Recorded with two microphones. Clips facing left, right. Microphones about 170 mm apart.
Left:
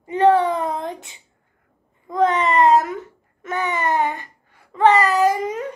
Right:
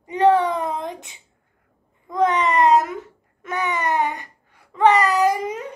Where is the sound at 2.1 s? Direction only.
20° right (ahead or behind).